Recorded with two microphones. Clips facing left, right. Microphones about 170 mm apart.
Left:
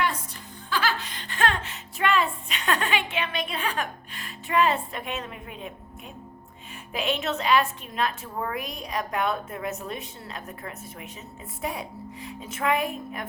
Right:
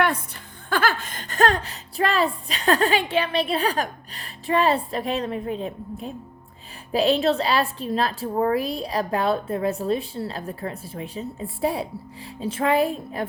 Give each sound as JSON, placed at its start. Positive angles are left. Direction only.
{"t": 0.7, "sound": "a woman's voice", "side_deg": -50}